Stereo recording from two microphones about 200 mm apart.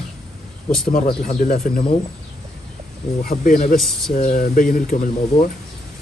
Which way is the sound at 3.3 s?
45° left (ahead or behind).